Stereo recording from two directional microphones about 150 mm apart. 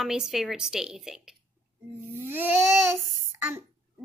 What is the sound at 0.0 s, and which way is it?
Speech, 5° right (ahead or behind).